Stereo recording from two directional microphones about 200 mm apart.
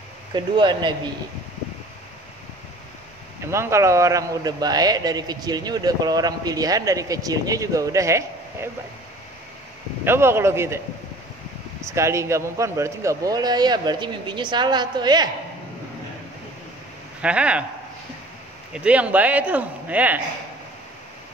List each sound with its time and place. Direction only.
0.3 s a man's voice: 25° right (ahead or behind)
3.5 s a man's voice: 15° right (ahead or behind)
10.0 s a man's voice: 10° right (ahead or behind)
11.8 s a man's voice: 15° right (ahead or behind)
17.2 s speech: 5° right (ahead or behind)
18.7 s a man's voice: 5° right (ahead or behind)